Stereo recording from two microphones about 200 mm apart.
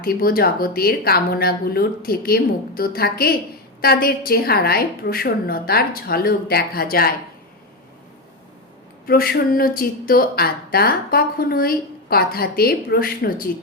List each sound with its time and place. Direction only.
0.0 s a woman's voice: 50° left (ahead or behind)
9.0 s a woman's voice: 50° left (ahead or behind)